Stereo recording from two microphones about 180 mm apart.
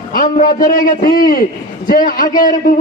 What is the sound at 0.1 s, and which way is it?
A man's voice, 50° left (ahead or behind).